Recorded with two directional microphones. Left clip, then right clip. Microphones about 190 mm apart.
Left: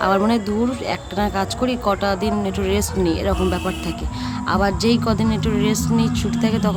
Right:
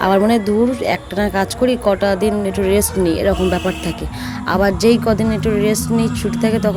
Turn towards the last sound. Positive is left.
turn(degrees=-10)  # may be behind; listen again after turning